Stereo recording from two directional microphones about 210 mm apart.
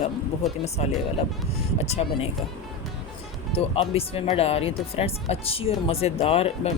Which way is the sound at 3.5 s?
30° left (ahead or behind).